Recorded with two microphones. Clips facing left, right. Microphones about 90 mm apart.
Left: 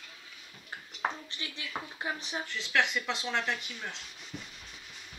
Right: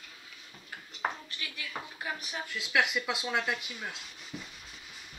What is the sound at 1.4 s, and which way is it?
Dishes, 25° left (ahead or behind).